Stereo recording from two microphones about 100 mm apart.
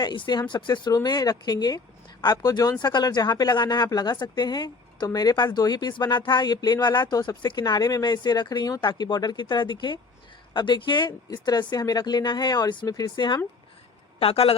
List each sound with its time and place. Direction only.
0.0 s speech: 45° left (ahead or behind)
14.2 s a woman's voice: 75° left (ahead or behind)